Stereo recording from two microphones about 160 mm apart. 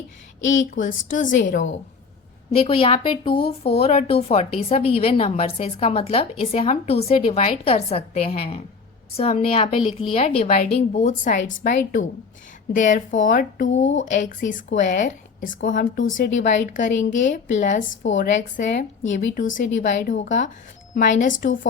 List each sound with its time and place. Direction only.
0.5 s a woman's voice: 55° left (ahead or behind)
2.5 s speech: 35° left (ahead or behind)
11.3 s a woman's voice: 60° left (ahead or behind)